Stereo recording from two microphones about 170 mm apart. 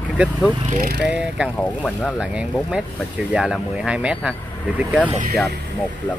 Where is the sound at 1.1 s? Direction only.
5° right (ahead or behind).